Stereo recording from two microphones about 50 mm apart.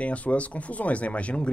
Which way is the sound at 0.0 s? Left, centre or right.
Left.